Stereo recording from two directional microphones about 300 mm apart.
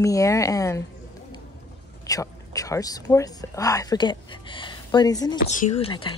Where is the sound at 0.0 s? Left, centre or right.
Centre.